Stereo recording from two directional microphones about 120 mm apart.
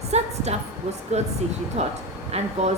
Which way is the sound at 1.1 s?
65° right (ahead or behind).